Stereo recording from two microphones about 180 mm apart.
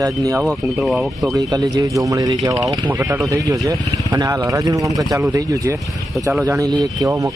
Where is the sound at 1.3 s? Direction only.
20° right (ahead or behind).